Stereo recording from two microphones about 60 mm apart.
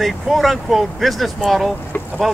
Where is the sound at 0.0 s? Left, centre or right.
Centre.